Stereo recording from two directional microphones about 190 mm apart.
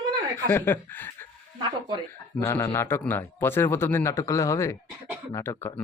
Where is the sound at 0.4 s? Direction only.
10° left (ahead or behind).